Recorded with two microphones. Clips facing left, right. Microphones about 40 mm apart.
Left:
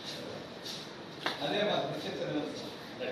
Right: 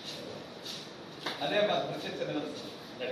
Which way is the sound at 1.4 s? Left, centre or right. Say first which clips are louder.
Right 3 dB; right.